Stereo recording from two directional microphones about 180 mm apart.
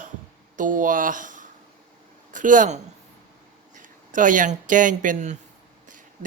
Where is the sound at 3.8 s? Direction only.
45° right (ahead or behind).